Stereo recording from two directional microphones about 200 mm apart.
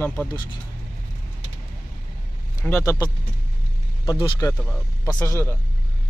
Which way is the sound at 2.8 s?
15° left (ahead or behind).